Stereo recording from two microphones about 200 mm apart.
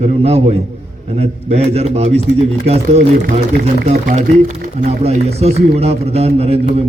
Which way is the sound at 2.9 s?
50° right (ahead or behind).